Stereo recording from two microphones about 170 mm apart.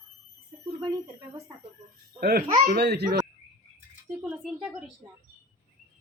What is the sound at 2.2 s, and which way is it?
Speech, 65° right (ahead or behind).